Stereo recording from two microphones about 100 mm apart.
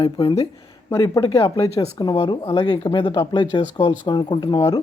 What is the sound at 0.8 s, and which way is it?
Speech, 30° left (ahead or behind).